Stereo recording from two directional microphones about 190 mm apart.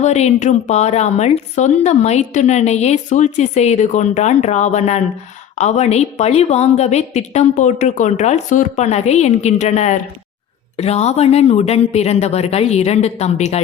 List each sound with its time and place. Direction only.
0.0 s a woman's voice: 35° left (ahead or behind)